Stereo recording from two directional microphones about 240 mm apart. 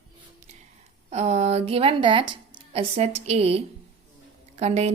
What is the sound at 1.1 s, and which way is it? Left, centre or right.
A woman's voice, right.